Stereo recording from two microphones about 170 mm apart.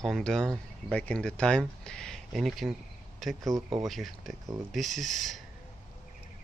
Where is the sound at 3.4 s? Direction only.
20° right (ahead or behind).